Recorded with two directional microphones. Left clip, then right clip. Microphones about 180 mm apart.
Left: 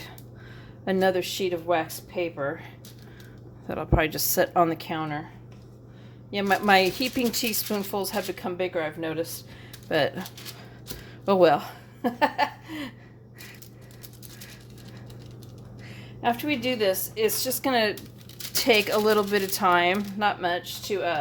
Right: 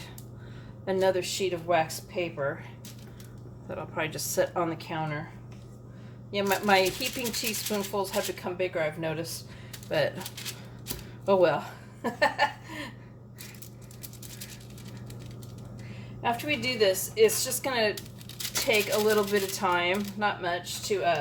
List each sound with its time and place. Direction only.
0.9 s speech: 50° left (ahead or behind)
3.7 s speech: 50° left (ahead or behind)
6.3 s speech: 50° left (ahead or behind)
11.3 s a woman's voice: 55° left (ahead or behind)
16.4 s speech: 50° left (ahead or behind)